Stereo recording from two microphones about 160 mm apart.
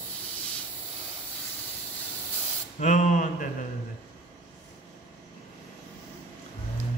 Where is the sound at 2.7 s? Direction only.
50° left (ahead or behind).